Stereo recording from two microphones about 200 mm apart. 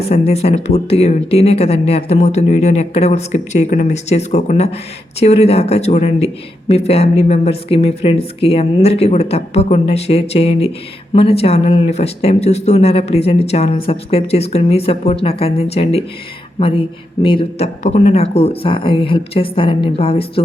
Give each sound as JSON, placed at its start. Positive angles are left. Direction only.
{"t": 0.0, "sound": "speech", "side_deg": 30}